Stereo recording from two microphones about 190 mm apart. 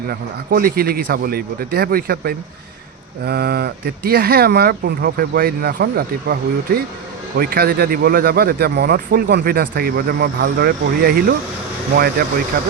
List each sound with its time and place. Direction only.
0.1 s speech: 50° right (ahead or behind)